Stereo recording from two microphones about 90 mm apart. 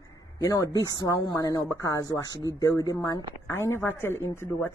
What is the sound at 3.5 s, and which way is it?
Speech, 25° left (ahead or behind).